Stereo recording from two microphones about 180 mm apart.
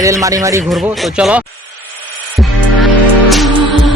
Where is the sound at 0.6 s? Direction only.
Centre (ahead or behind).